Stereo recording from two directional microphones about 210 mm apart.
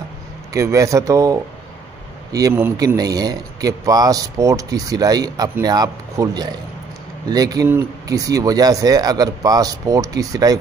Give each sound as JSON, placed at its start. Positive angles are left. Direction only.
{"t": 0.5, "sound": "a man's voice", "side_deg": -15}